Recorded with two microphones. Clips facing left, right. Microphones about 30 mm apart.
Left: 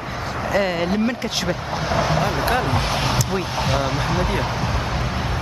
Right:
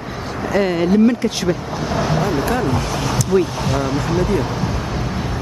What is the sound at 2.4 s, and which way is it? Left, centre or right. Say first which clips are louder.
Speech: right 1 dB; left.